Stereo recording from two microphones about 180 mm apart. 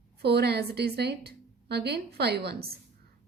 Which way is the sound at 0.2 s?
65° right (ahead or behind).